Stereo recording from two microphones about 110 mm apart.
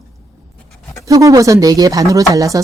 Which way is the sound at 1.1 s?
30° right (ahead or behind).